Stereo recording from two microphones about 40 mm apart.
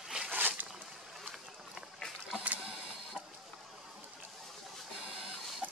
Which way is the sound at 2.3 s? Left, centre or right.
Right.